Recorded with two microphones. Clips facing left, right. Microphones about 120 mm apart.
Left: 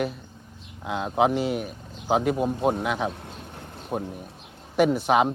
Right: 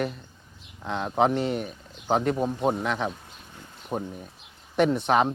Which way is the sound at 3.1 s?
65° left (ahead or behind).